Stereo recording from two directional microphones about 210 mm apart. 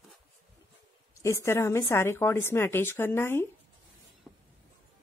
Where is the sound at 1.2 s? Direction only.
15° left (ahead or behind).